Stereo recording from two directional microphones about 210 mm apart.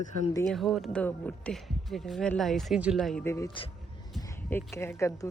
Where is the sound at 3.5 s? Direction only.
25° left (ahead or behind).